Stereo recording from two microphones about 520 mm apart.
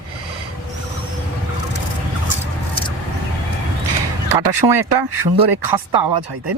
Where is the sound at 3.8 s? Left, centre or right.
Right.